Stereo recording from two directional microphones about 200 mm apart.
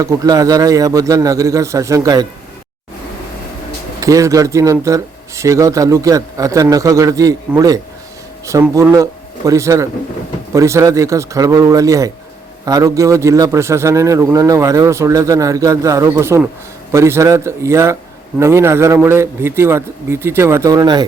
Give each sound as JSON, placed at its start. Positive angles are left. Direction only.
{"t": 0.0, "sound": "a man's voice", "side_deg": -15}
{"t": 4.0, "sound": "a man's voice", "side_deg": -15}